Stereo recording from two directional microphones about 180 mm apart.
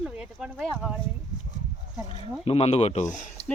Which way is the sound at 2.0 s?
30° left (ahead or behind).